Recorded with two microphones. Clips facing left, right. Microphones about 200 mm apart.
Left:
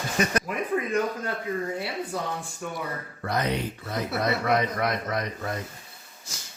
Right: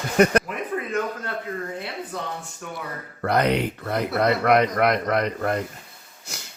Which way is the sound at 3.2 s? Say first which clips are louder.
Right 7 dB; 65° right (ahead or behind).